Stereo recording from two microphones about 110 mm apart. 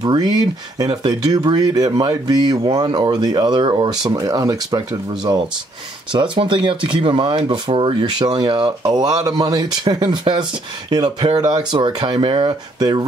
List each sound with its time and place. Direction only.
0.0 s speech: 40° right (ahead or behind)
6.1 s speech: 45° right (ahead or behind)